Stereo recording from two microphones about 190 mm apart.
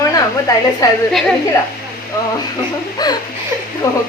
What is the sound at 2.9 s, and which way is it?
A woman's voice, 20° left (ahead or behind).